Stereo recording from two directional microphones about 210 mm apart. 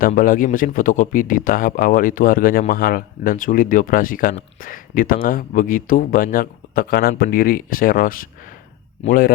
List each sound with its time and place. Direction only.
0.0 s a man's voice: 40° left (ahead or behind)